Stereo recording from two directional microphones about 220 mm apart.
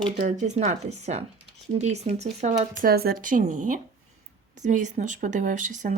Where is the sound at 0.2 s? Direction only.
35° right (ahead or behind).